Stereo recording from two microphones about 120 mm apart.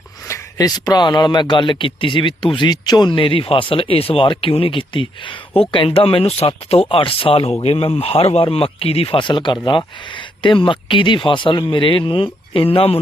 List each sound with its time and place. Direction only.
0.3 s speech: 25° left (ahead or behind); by 13.0 s 55° left (ahead or behind)